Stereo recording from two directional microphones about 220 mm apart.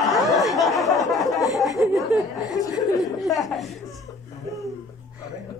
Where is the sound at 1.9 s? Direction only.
Centre (ahead or behind).